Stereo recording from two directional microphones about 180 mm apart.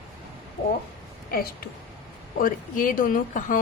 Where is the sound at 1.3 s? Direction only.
55° left (ahead or behind).